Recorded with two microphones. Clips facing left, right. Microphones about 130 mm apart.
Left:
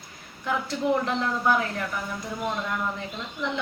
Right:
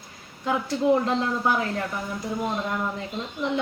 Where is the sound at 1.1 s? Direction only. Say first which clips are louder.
Right 1 dB; 25° right (ahead or behind).